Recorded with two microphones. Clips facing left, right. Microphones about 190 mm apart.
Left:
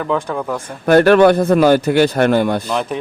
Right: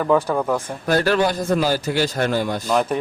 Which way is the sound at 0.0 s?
5° right (ahead or behind).